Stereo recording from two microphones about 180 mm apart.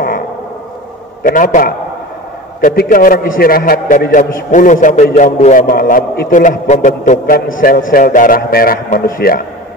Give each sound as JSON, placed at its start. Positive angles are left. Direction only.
{"t": 1.2, "sound": "a man's voice", "side_deg": 45}